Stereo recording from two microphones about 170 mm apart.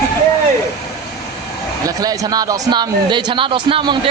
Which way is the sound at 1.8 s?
20° right (ahead or behind).